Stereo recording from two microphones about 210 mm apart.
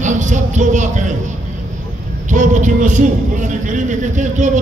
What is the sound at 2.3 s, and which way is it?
A man's voice, 35° right (ahead or behind).